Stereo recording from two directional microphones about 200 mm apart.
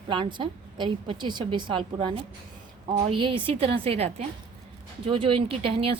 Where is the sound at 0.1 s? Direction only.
25° right (ahead or behind).